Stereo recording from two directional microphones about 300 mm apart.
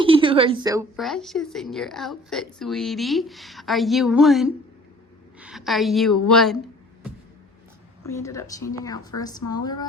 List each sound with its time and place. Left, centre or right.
0.0 s a woman's voice: centre
0.9 s a woman's voice: centre
8.0 s a woman's voice: centre